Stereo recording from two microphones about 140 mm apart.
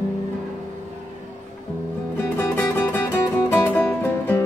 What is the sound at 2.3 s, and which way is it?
Music, 15° left (ahead or behind).